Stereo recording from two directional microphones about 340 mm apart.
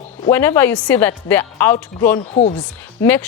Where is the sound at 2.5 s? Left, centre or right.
Centre.